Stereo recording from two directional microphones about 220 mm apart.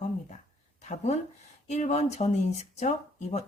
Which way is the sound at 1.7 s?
30° left (ahead or behind).